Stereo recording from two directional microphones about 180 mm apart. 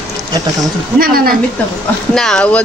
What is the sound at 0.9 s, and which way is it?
Speech, 55° right (ahead or behind).